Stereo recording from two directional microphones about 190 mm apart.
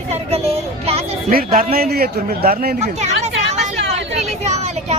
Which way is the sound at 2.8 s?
35° right (ahead or behind).